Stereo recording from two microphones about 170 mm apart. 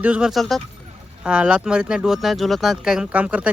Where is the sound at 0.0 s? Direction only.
5° right (ahead or behind).